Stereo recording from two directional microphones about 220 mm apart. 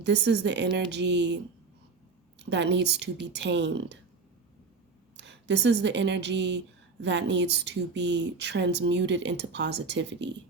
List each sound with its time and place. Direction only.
0.0 s a woman's voice: 50° right (ahead or behind)
2.4 s a woman's voice: 50° right (ahead or behind)
5.1 s a woman's voice: 50° right (ahead or behind)